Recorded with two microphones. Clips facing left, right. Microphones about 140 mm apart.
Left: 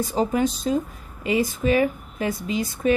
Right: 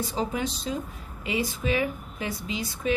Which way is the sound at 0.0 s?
45° left (ahead or behind).